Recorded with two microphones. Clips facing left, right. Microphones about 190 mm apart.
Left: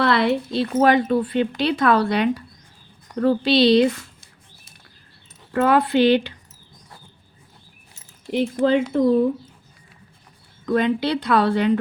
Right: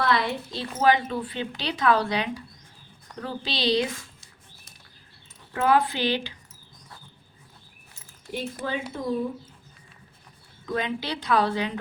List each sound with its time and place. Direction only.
0.0 s a woman's voice: 70° left (ahead or behind)
5.5 s a woman's voice: 65° left (ahead or behind)
8.3 s speech: 70° left (ahead or behind)
10.7 s a woman's voice: 60° left (ahead or behind)